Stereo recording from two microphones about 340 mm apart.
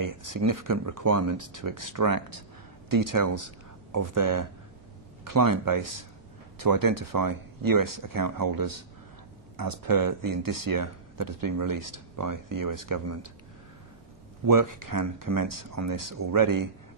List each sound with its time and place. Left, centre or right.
0.0 s speech: right
2.9 s speech: right
13.0 s speech: right
14.5 s speech: right